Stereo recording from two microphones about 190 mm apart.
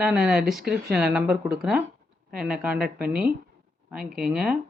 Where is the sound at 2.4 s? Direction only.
5° right (ahead or behind).